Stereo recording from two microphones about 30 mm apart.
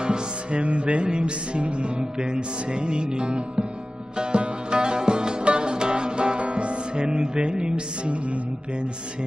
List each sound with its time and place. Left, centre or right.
0.0 s music: right
0.6 s music: right